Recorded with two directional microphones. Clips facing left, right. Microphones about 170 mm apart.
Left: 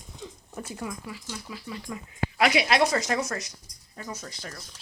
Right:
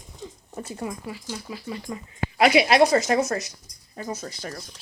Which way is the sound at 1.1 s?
45° right (ahead or behind).